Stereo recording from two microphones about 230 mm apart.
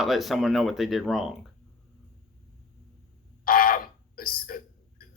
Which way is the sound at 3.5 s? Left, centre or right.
Left.